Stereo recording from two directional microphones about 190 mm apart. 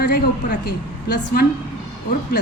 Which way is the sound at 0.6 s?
60° left (ahead or behind).